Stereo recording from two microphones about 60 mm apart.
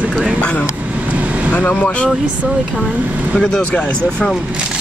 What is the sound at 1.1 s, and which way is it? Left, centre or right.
Vehicle, right.